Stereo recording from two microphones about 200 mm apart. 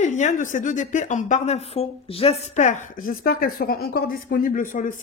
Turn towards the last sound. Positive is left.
turn(degrees=40)  # may be behind; listen again after turning